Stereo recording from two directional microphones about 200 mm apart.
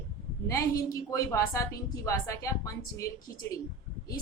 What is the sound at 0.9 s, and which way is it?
A woman's voice, 15° left (ahead or behind).